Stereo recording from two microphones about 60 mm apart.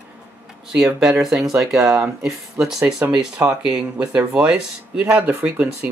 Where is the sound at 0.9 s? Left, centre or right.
Centre.